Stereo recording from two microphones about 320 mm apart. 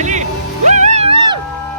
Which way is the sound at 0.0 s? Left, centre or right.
Right.